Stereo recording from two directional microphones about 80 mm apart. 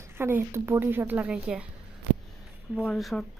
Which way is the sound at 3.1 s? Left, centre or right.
Centre.